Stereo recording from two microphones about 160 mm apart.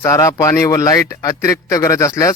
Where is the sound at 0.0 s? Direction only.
20° left (ahead or behind).